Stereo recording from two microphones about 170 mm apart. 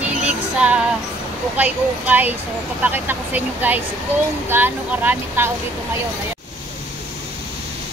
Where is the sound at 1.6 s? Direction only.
10° right (ahead or behind).